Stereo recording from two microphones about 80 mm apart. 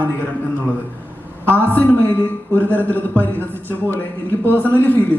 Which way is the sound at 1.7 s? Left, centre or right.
Left.